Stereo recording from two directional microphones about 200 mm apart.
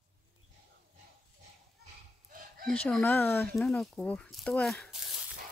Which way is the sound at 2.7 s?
5° left (ahead or behind).